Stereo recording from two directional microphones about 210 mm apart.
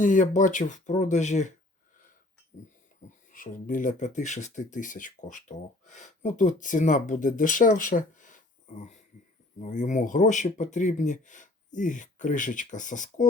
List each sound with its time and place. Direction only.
0.0 s speech: 35° left (ahead or behind)
3.0 s music: 40° left (ahead or behind)
3.3 s speech: 40° left (ahead or behind)